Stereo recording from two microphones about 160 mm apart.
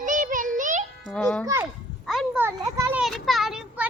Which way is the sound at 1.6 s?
Centre (ahead or behind).